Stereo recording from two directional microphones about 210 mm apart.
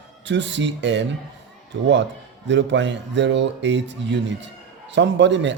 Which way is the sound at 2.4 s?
55° right (ahead or behind).